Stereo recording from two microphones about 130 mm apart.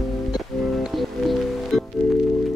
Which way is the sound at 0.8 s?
Centre (ahead or behind).